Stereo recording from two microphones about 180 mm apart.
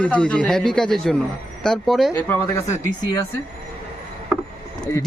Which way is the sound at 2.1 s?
15° left (ahead or behind).